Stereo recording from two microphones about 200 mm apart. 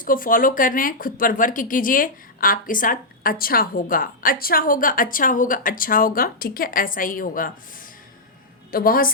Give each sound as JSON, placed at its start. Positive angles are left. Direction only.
{"t": 0.0, "sound": "speech", "side_deg": 45}